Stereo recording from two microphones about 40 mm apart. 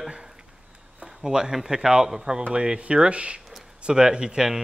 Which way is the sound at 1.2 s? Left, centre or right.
Centre.